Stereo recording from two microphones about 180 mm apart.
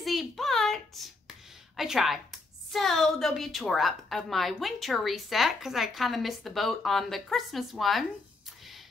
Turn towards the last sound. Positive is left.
turn(degrees=0)  # may be behind; listen again after turning